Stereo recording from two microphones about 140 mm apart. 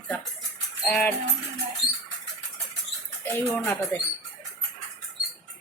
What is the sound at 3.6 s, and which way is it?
Speech, 20° left (ahead or behind).